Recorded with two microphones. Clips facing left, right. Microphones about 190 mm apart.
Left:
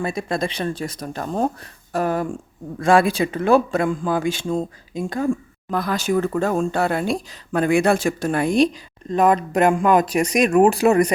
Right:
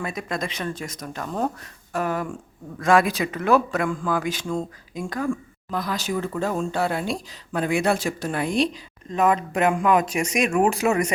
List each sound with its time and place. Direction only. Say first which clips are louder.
0.0 s a man's voice: left 5 dB; 30° left (ahead or behind)
5.7 s speech: left 6 dB; 55° left (ahead or behind); by 11.1 s 35° left (ahead or behind)